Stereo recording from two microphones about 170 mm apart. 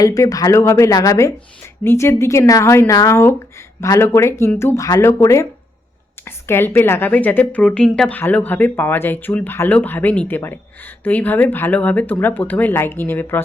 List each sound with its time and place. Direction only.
0.0 s a woman's voice: 20° left (ahead or behind)